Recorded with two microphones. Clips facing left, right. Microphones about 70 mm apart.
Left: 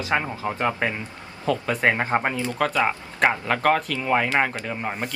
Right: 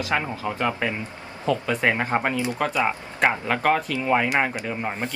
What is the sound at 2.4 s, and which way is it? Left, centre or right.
Speech, centre.